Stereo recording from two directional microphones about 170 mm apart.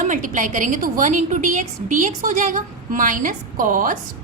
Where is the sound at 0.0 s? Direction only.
50° right (ahead or behind).